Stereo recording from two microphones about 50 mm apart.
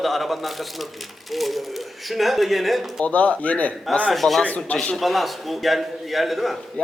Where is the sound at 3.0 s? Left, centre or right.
Left.